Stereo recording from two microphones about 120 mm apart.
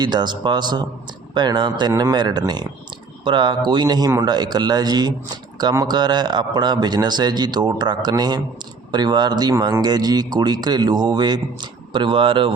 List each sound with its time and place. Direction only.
0.0 s a man's voice: 35° right (ahead or behind)